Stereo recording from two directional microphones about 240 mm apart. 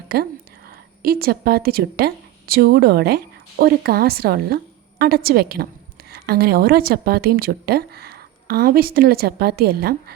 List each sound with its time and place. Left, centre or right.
0.1 s a woman's voice: right